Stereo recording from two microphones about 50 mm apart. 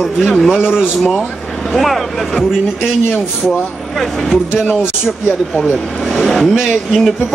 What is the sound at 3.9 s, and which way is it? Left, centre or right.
Speech, centre.